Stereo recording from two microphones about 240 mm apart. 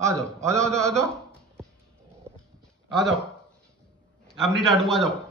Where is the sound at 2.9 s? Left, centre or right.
Centre.